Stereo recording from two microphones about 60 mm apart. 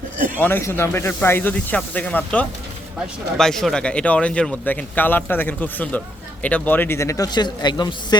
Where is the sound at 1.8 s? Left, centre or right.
Centre.